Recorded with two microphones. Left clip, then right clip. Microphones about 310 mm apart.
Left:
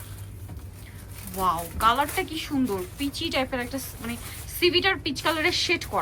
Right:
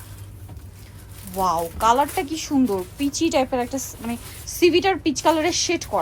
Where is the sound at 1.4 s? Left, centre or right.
Centre.